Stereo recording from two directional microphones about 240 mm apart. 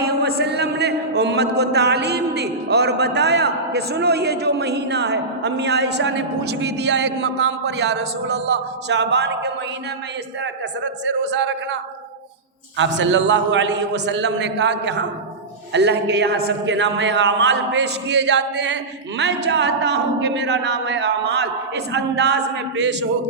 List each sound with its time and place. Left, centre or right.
0.0 s a man's voice: right